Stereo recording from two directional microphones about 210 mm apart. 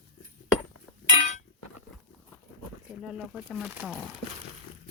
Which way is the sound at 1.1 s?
35° left (ahead or behind).